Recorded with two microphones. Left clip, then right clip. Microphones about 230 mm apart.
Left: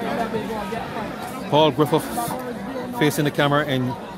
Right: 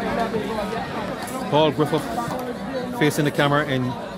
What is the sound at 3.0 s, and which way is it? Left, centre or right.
Speech, centre.